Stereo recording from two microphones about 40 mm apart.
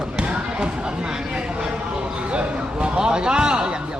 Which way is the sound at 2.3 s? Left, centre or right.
Right.